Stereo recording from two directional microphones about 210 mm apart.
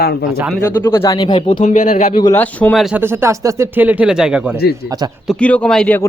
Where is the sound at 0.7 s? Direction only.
10° left (ahead or behind).